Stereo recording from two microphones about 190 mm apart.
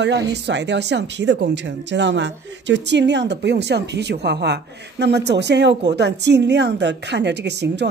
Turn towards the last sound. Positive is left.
turn(degrees=-65)  # may be behind; listen again after turning